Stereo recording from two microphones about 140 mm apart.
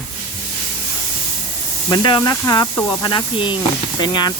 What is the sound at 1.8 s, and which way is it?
Speech, 30° left (ahead or behind).